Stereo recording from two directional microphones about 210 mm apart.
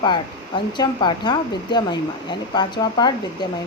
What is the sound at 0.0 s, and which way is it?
Speech, 20° left (ahead or behind).